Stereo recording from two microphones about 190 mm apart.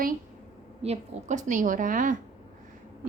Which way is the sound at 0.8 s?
35° right (ahead or behind).